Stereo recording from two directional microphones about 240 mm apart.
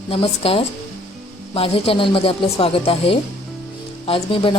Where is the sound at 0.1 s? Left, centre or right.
Left.